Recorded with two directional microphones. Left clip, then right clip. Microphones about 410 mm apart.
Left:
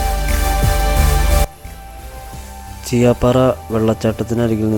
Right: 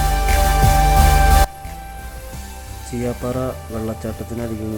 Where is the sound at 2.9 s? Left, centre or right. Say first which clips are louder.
Left 11 dB; left.